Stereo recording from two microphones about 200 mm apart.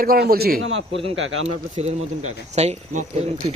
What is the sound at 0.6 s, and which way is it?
Speech, 90° right.